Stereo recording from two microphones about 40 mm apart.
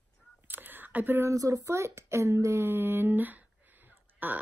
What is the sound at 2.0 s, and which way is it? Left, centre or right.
Speech, right.